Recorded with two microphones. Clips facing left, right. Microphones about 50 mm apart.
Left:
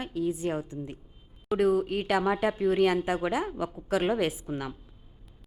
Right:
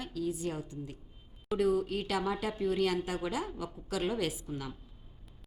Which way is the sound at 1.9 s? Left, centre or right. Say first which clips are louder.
Left 6 dB; left.